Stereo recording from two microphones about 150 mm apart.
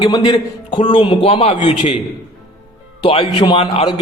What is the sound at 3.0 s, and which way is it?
Speech, 40° left (ahead or behind).